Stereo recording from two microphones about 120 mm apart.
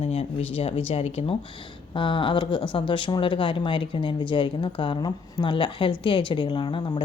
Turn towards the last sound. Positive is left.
turn(degrees=45)  # may be behind; listen again after turning